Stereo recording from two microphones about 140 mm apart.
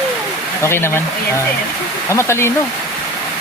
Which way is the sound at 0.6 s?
20° left (ahead or behind).